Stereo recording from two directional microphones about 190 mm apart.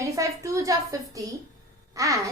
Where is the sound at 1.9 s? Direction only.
15° right (ahead or behind).